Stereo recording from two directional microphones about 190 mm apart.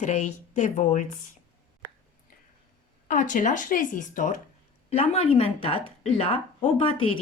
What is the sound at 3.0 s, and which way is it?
A woman's voice, 40° left (ahead or behind).